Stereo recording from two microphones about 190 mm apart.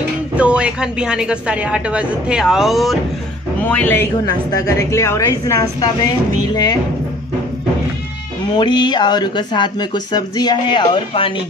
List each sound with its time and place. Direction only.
0.4 s a woman's voice: 5° right (ahead or behind); by 6.8 s 20° left (ahead or behind)
8.5 s speech: 25° left (ahead or behind)